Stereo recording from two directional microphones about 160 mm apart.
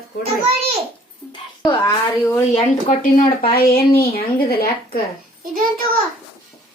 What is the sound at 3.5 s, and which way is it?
Speech, 70° left (ahead or behind).